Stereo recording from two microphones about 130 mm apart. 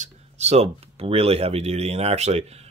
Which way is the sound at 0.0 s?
55° right (ahead or behind).